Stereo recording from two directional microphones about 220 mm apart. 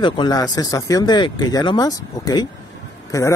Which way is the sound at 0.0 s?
20° left (ahead or behind).